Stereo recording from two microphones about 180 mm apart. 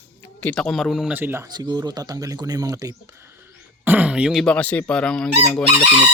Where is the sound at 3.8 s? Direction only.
10° right (ahead or behind).